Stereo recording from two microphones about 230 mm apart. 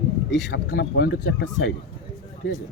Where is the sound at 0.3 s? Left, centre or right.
Left.